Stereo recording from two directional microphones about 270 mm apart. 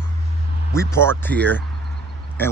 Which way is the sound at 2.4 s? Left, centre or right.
Centre.